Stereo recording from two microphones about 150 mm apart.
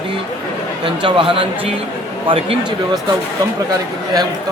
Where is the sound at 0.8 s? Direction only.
35° right (ahead or behind).